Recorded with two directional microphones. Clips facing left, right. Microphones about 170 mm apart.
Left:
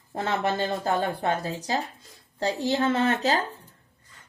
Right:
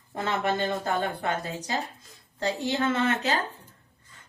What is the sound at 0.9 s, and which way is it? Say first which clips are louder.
A woman's voice: left 3 dB; 35° left (ahead or behind).